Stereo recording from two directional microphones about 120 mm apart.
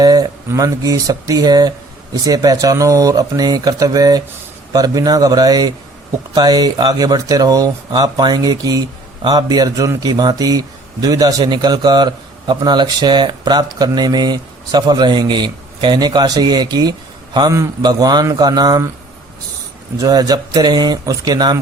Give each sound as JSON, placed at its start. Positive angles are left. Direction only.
{"t": 0.0, "sound": "speech", "side_deg": -30}
{"t": 20.0, "sound": "speech", "side_deg": -30}